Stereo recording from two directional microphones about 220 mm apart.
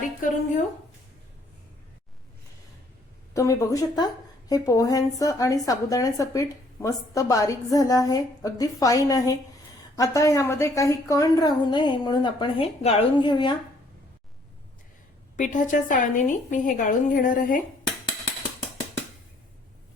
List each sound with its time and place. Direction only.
0.2 s a woman's voice: 35° left (ahead or behind)
3.3 s a woman's voice: 15° left (ahead or behind)
15.4 s a woman's voice: 35° left (ahead or behind)